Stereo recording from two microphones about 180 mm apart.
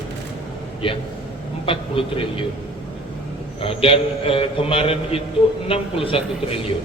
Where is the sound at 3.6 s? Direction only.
30° left (ahead or behind).